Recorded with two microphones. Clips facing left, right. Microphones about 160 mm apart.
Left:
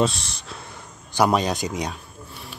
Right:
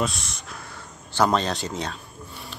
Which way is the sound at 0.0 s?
30° left (ahead or behind).